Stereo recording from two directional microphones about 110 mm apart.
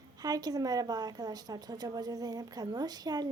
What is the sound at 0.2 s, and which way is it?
Speech, 35° right (ahead or behind).